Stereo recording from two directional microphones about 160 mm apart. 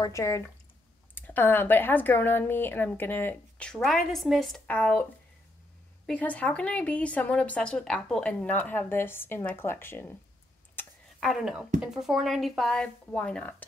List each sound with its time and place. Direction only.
0.0 s speech: 20° left (ahead or behind)
6.0 s speech: 10° left (ahead or behind)
10.8 s a sound: centre (ahead or behind)
11.8 s speech: centre (ahead or behind)